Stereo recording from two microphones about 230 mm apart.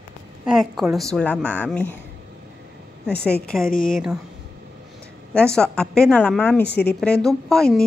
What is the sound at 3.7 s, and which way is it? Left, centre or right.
Speech, left.